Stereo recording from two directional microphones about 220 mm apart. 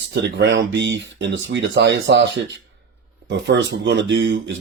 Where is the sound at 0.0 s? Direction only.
55° right (ahead or behind).